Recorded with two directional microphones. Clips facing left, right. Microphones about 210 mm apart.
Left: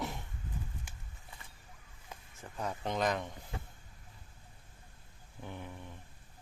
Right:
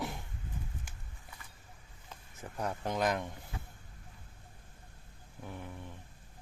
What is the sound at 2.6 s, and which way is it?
Speech, 10° right (ahead or behind).